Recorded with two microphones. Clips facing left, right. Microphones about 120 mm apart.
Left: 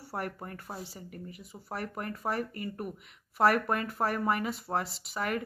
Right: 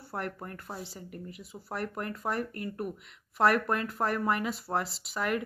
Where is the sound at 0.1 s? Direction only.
5° left (ahead or behind).